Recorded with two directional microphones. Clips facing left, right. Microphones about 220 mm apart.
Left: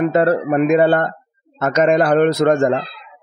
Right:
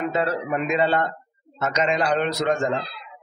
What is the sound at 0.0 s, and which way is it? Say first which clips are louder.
Speech: left 9 dB; 50° left (ahead or behind).